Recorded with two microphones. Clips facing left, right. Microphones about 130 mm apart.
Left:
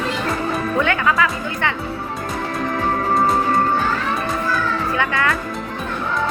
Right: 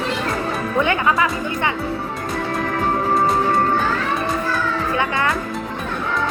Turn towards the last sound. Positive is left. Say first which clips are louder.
# even
turn(degrees=-25)  # may be behind; listen again after turning